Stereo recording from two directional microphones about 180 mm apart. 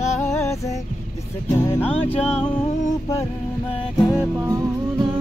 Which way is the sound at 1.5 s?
15° left (ahead or behind).